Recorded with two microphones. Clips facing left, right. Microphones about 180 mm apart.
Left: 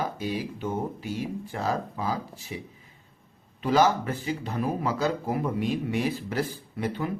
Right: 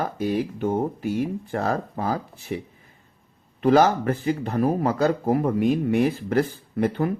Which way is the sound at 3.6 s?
55° right (ahead or behind).